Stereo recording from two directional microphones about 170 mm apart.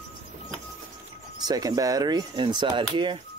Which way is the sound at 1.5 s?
20° right (ahead or behind).